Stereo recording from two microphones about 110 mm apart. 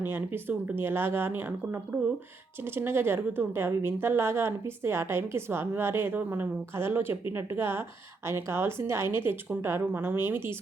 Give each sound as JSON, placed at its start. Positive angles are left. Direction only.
{"t": 0.0, "sound": "a woman's voice", "side_deg": -20}